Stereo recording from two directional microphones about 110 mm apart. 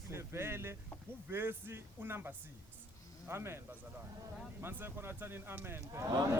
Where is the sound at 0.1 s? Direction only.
25° right (ahead or behind).